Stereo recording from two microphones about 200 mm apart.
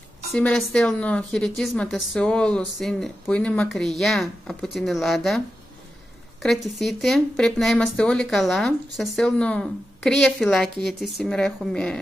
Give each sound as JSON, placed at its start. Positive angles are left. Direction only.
{"t": 0.3, "sound": "speech", "side_deg": 5}
{"t": 6.4, "sound": "speech", "side_deg": 0}